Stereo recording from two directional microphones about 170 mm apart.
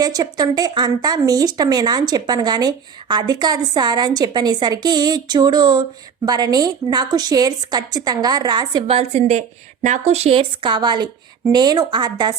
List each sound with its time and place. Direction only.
0.0 s speech: 20° right (ahead or behind)